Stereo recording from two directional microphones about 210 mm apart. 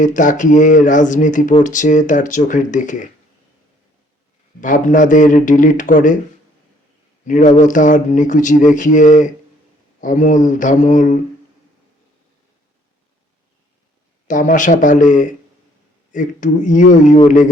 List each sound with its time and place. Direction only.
0.0 s speech: 35° left (ahead or behind)
4.6 s speech: 40° left (ahead or behind)
7.3 s speech: 35° left (ahead or behind)
14.3 s speech: 35° left (ahead or behind)